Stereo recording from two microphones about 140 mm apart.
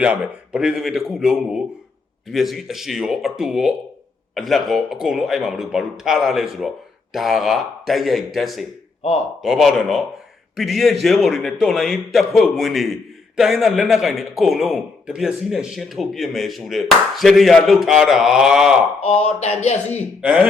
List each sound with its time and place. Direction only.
0.0 s a man's voice: 5° right (ahead or behind)
19.2 s speech: 50° left (ahead or behind)
20.2 s speech: 10° right (ahead or behind)